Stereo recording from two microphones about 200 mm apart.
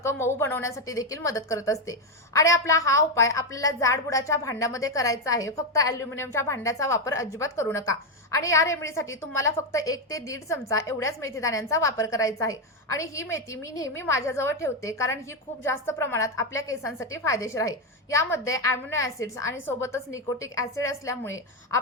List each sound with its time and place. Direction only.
0.0 s a woman's voice: 15° left (ahead or behind)